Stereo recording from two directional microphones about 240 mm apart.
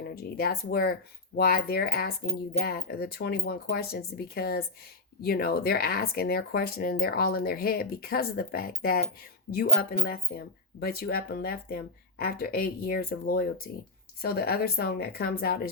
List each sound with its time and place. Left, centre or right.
0.0 s speech: left